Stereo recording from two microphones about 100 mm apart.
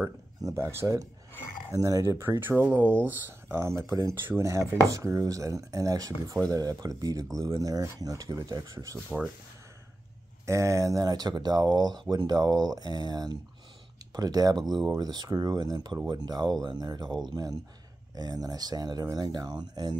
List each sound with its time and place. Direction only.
0.0 s speech: 30° right (ahead or behind)
10.4 s speech: 30° right (ahead or behind)